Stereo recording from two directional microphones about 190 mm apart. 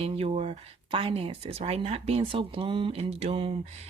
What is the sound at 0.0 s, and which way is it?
Speech, 30° right (ahead or behind).